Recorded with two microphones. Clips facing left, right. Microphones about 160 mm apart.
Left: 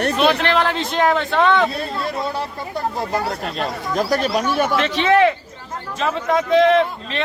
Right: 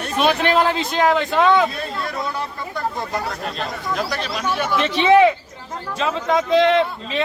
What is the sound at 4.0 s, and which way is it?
Speech, 45° left (ahead or behind).